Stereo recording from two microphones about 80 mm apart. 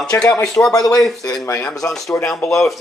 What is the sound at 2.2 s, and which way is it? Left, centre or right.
Speech, centre.